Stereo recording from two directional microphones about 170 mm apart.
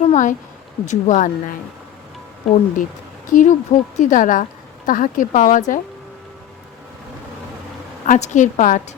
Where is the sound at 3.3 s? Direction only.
50° left (ahead or behind).